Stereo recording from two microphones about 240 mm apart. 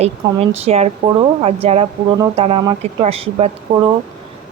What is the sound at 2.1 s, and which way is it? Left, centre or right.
A woman's voice, centre.